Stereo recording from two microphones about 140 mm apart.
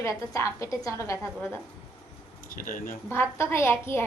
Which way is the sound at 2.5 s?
75° left (ahead or behind).